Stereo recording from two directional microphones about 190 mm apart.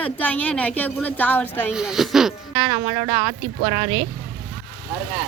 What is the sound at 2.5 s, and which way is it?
Speech, 20° right (ahead or behind).